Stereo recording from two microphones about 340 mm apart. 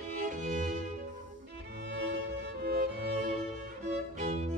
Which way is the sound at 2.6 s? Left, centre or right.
Right.